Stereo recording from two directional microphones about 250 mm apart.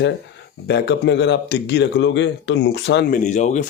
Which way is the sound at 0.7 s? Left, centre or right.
Left.